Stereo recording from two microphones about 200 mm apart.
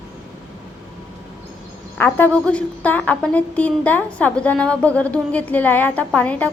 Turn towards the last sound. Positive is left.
turn(degrees=5)  # may be behind; listen again after turning